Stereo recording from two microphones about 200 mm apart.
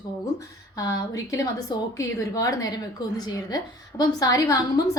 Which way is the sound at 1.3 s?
15° left (ahead or behind).